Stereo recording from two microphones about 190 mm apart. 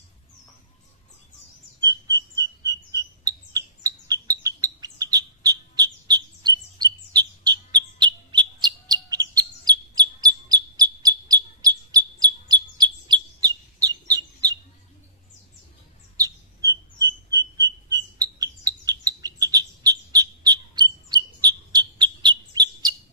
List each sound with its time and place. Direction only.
1.8 s frog: 20° right (ahead or behind)
16.2 s frog: 20° right (ahead or behind)